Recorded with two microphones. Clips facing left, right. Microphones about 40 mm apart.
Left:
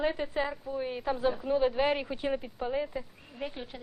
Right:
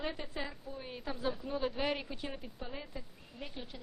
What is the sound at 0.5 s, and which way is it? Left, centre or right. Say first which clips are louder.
A woman's voice: left 11 dB; left.